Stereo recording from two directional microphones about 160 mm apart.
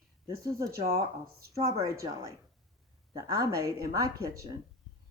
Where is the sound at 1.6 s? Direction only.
35° right (ahead or behind).